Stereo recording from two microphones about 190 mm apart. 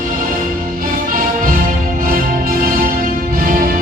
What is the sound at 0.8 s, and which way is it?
Music, 50° right (ahead or behind).